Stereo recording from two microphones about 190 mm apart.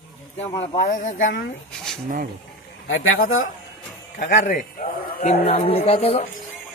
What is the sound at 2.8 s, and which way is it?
Speech, 90° left.